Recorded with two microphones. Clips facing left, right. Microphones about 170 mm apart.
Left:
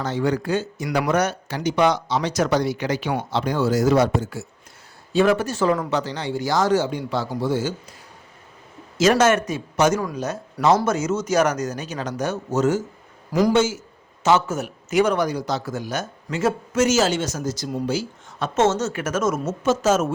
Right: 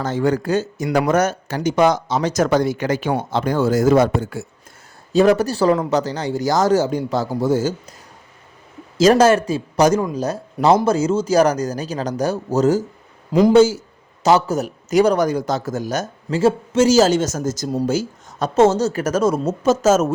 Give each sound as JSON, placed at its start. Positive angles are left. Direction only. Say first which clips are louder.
{"t": 0.0, "sound": "speech", "louder": "right 3 dB", "side_deg": -45}
{"t": 5.1, "sound": "speech", "louder": "right 4 dB", "side_deg": -40}
{"t": 9.0, "sound": "speech", "louder": "right 4 dB", "side_deg": -35}